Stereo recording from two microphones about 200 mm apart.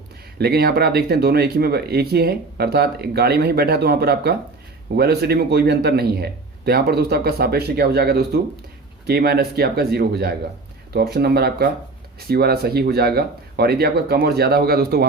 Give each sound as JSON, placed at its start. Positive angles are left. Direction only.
{"t": 0.3, "sound": "speech", "side_deg": -50}